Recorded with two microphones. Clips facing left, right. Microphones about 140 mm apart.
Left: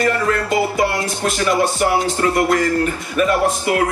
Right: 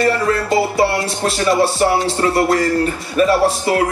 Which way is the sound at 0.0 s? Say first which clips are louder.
Right 2 dB; 30° right (ahead or behind).